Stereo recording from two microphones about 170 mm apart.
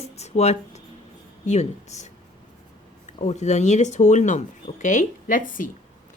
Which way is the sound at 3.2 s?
45° left (ahead or behind).